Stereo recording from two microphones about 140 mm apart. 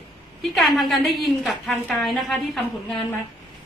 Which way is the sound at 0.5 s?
Centre (ahead or behind).